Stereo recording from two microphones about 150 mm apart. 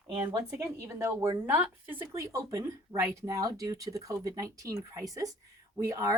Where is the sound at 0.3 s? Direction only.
20° right (ahead or behind).